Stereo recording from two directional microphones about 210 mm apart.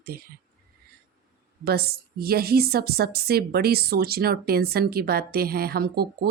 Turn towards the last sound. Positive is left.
turn(degrees=-45)  # may be behind; listen again after turning